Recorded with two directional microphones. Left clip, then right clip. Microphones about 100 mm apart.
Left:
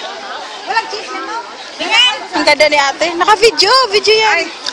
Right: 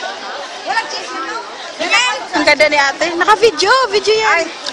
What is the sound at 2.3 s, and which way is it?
A woman's voice, 10° left (ahead or behind).